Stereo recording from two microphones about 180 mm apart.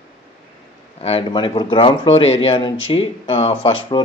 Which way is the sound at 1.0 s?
35° left (ahead or behind).